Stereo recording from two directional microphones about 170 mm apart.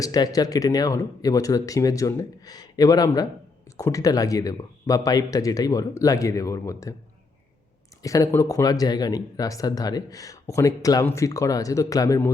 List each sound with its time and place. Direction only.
0.0 s speech: 20° left (ahead or behind)
8.0 s speech: 20° left (ahead or behind)